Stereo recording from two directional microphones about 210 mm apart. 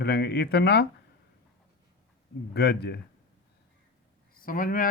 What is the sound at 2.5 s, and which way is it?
Speech, 50° left (ahead or behind).